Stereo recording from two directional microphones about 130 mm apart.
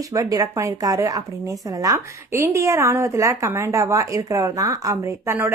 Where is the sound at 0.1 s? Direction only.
25° right (ahead or behind).